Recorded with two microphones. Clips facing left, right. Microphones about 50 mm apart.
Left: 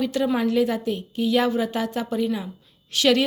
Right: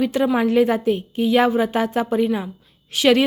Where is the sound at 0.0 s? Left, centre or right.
Right.